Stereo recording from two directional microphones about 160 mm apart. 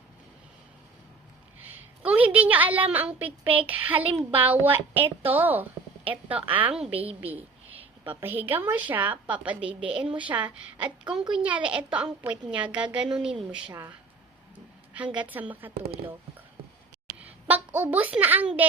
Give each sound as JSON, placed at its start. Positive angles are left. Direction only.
{"t": 2.0, "sound": "a woman's voice", "side_deg": -10}
{"t": 7.0, "sound": "a woman's voice", "side_deg": -35}
{"t": 7.8, "sound": "a sound", "side_deg": -35}
{"t": 8.2, "sound": "a woman's voice", "side_deg": -10}
{"t": 14.9, "sound": "a woman's voice", "side_deg": -10}
{"t": 17.5, "sound": "a woman's voice", "side_deg": -10}